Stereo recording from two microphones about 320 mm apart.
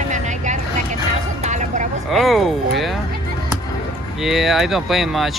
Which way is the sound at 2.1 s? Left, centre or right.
Centre.